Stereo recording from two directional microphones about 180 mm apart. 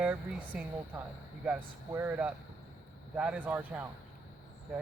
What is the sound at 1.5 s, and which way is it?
Speech, 10° right (ahead or behind).